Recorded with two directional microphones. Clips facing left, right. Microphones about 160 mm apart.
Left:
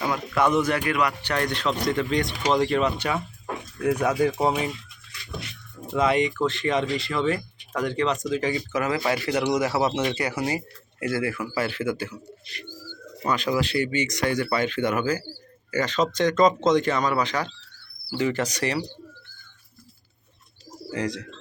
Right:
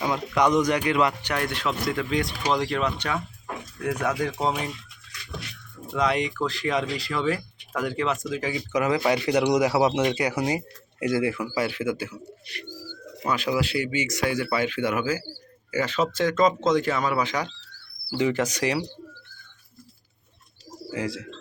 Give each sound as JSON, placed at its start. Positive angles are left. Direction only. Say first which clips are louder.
{"t": 0.1, "sound": "speech", "louder": "right 1 dB", "side_deg": -15}
{"t": 1.2, "sound": "speech", "louder": "left 2 dB", "side_deg": -10}
{"t": 5.9, "sound": "speech", "louder": "left 3 dB", "side_deg": 5}
{"t": 8.7, "sound": "speech", "louder": "right 6 dB", "side_deg": -15}
{"t": 13.2, "sound": "speech", "louder": "left 1 dB", "side_deg": -10}
{"t": 20.9, "sound": "speech", "louder": "left 1 dB", "side_deg": -5}